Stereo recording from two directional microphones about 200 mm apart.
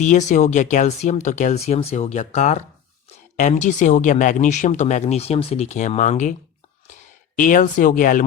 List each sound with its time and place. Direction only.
0.0 s speech: 35° left (ahead or behind)